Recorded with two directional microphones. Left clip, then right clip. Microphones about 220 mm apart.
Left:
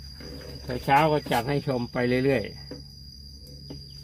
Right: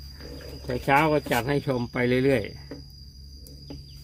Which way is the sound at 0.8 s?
25° right (ahead or behind).